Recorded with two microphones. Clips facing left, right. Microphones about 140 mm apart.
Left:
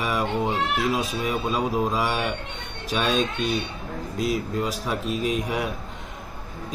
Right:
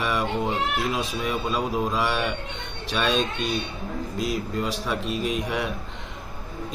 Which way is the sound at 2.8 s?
45° left (ahead or behind).